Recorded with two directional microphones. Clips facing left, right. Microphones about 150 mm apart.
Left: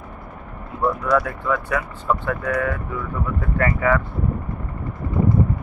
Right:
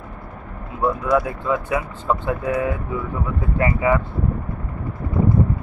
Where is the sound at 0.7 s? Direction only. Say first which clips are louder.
Right 1 dB; 20° right (ahead or behind).